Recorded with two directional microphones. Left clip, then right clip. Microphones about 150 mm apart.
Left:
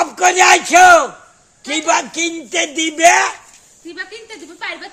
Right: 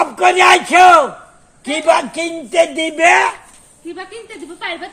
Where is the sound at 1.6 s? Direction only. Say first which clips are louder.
Right 3 dB; 15° left (ahead or behind).